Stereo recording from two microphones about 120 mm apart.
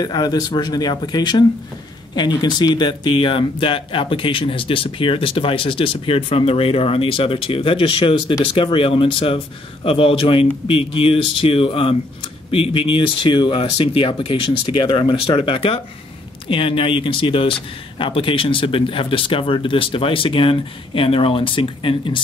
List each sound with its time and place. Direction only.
0.0 s speech: 35° left (ahead or behind)